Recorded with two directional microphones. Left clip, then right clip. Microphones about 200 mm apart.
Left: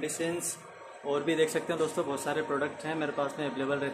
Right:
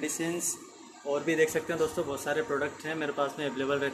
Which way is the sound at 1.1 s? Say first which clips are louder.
Right 1 dB; 5° left (ahead or behind).